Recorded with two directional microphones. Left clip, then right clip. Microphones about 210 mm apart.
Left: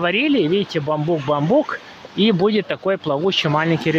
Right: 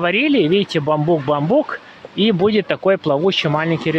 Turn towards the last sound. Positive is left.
turn(degrees=0)  # may be behind; listen again after turning